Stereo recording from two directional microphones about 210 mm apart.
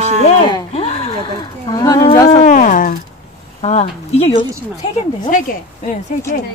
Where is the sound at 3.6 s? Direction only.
30° left (ahead or behind).